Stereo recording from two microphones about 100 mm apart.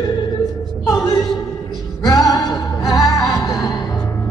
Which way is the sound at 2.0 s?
40° left (ahead or behind).